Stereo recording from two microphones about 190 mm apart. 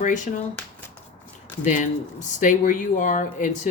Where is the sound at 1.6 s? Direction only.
40° left (ahead or behind).